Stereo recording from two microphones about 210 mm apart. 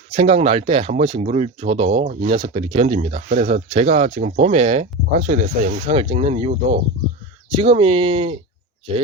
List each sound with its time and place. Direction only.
0.1 s speech: 30° right (ahead or behind)